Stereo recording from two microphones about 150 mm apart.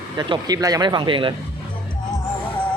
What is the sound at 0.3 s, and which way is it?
Speech, 25° right (ahead or behind).